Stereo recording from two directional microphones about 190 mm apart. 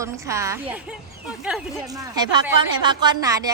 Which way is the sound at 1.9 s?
20° right (ahead or behind).